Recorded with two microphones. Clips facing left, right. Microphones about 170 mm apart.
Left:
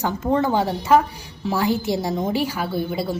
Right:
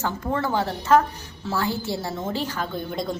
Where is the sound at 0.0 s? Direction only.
20° left (ahead or behind).